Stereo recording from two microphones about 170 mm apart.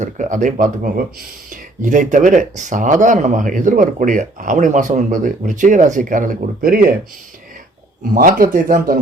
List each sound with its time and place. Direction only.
0.0 s speech: 45° right (ahead or behind)
8.1 s speech: 55° right (ahead or behind)